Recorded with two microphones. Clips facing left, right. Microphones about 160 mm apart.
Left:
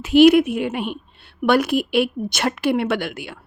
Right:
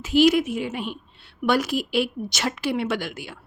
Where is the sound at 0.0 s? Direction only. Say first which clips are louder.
Left 6 dB; 65° left (ahead or behind).